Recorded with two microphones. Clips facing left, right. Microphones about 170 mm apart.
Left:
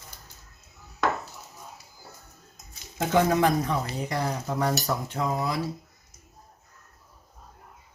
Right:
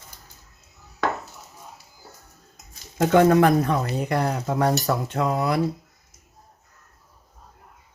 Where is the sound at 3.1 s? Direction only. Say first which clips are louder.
Right 6 dB; 60° right (ahead or behind).